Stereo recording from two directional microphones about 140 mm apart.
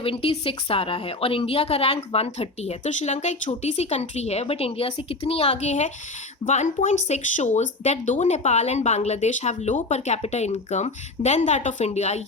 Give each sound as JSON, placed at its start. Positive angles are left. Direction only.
{"t": 0.0, "sound": "a woman's voice", "side_deg": 40}